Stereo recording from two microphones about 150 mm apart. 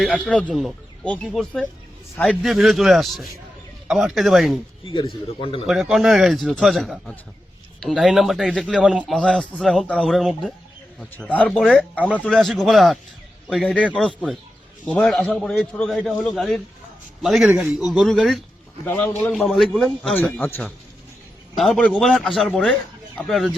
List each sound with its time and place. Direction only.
0.1 s a man's voice: 5° left (ahead or behind)
4.9 s a man's voice: 35° left (ahead or behind)
5.6 s a man's voice: centre (ahead or behind)
18.9 s a man's voice: 10° left (ahead or behind)
19.4 s a man's voice: centre (ahead or behind)